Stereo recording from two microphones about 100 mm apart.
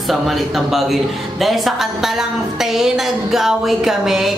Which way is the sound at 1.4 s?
Centre (ahead or behind).